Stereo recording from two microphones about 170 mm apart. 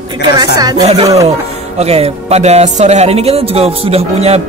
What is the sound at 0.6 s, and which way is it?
Speech, 25° right (ahead or behind).